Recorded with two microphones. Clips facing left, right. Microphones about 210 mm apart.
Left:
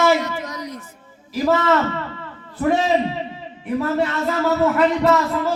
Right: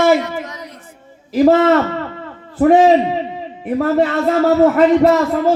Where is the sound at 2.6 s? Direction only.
55° right (ahead or behind).